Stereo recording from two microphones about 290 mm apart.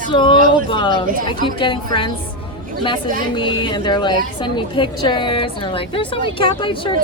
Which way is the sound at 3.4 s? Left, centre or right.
Centre.